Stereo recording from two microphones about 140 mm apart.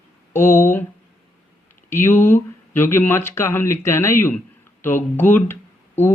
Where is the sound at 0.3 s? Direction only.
15° left (ahead or behind).